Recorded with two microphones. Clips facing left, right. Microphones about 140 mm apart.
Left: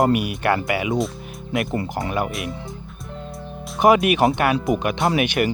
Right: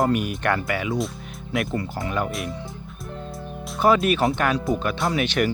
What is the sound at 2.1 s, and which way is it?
Speech, 5° left (ahead or behind).